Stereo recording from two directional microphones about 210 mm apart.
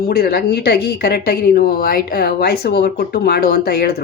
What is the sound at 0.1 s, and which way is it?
A woman's voice, 45° left (ahead or behind).